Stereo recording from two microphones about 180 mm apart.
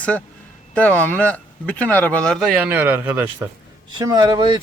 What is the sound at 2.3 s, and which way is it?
Speech, 5° right (ahead or behind).